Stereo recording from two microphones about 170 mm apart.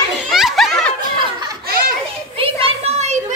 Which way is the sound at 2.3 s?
35° right (ahead or behind).